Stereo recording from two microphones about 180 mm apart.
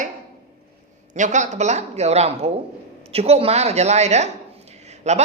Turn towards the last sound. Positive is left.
turn(degrees=-40)  # may be behind; listen again after turning